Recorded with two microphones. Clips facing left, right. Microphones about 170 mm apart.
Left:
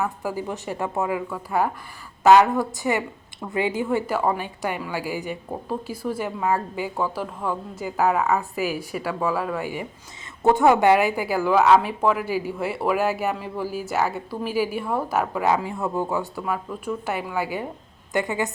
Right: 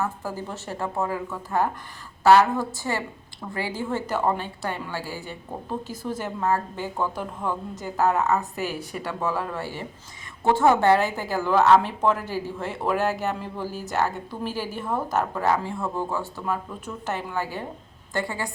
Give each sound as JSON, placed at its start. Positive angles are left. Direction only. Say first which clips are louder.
{"t": 0.0, "sound": "a woman's voice", "louder": "left 3 dB", "side_deg": 15}
{"t": 3.9, "sound": "a woman's voice", "louder": "right 1 dB", "side_deg": 10}